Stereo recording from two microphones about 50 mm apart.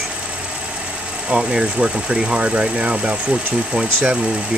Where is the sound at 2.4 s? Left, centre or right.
Right.